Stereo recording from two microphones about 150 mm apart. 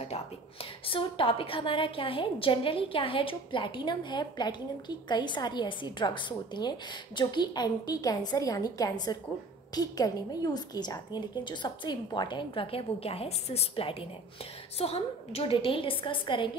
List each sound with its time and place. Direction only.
0.8 s a woman's voice: 35° left (ahead or behind)